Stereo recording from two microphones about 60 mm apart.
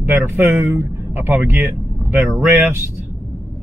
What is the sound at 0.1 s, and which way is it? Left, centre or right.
Speech, right.